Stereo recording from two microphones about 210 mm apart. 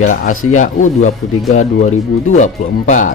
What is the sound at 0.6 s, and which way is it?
Speech, 35° left (ahead or behind).